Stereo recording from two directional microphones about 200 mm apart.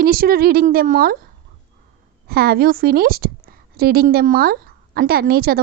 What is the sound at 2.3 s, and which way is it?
A woman's voice, 50° right (ahead or behind).